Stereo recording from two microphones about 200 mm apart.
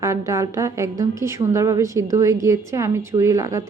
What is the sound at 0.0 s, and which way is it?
A woman's voice, 15° right (ahead or behind).